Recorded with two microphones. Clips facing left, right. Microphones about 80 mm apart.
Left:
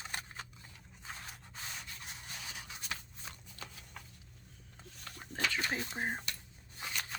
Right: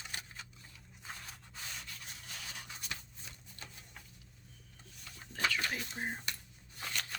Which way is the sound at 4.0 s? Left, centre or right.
Left.